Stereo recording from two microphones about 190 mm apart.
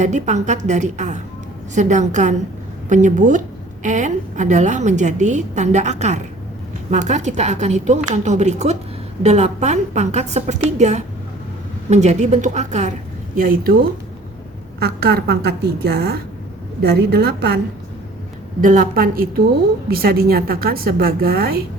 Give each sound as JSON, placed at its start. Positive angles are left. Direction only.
{"t": 0.0, "sound": "a woman's voice", "side_deg": -40}
{"t": 13.3, "sound": "a woman's voice", "side_deg": -50}
{"t": 14.8, "sound": "a woman's voice", "side_deg": -60}
{"t": 18.6, "sound": "a woman's voice", "side_deg": -45}